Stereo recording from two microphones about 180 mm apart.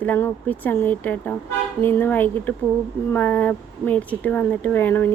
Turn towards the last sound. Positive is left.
turn(degrees=10)  # may be behind; listen again after turning